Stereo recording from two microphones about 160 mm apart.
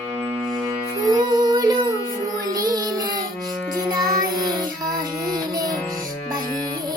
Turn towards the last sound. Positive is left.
turn(degrees=-25)  # may be behind; listen again after turning